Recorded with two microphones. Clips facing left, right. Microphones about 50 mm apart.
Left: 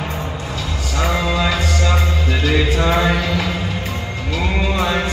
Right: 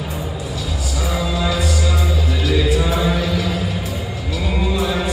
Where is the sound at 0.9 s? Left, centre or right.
Left.